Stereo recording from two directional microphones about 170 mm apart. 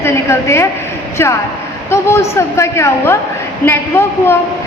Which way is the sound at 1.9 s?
15° left (ahead or behind).